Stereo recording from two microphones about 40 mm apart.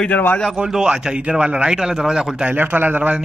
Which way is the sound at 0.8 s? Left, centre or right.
Right.